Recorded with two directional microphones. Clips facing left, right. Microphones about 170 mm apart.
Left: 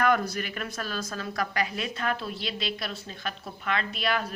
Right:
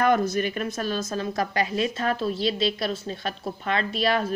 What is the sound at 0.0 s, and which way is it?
A woman's voice, 25° right (ahead or behind).